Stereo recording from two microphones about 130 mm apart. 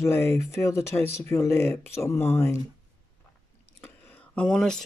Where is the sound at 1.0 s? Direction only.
55° right (ahead or behind).